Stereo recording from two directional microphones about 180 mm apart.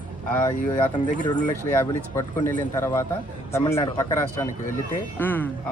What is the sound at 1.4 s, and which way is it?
A man's voice, 15° left (ahead or behind).